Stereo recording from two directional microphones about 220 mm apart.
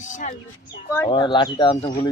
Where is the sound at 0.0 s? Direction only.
35° left (ahead or behind).